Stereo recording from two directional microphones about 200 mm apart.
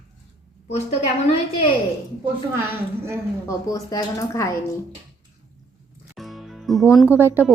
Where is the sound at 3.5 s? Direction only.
15° left (ahead or behind).